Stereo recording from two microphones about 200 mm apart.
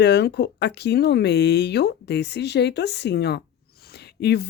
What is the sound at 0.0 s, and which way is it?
A woman's voice, 55° left (ahead or behind).